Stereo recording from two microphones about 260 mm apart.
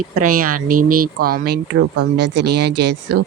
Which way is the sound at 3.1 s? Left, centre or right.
Right.